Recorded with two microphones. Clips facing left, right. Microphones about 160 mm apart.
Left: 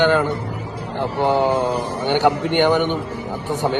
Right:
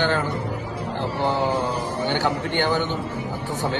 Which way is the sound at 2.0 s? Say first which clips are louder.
Left 8 dB; 20° left (ahead or behind).